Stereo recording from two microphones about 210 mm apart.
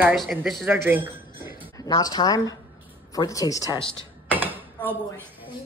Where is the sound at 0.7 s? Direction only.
10° right (ahead or behind).